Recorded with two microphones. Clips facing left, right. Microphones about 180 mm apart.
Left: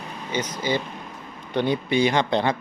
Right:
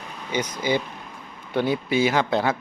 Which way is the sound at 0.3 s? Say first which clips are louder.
Right 1 dB; 10° right (ahead or behind).